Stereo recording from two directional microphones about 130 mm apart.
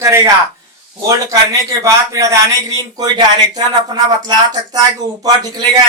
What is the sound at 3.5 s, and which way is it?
Speech, 30° right (ahead or behind).